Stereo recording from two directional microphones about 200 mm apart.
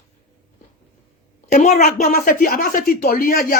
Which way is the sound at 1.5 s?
35° left (ahead or behind).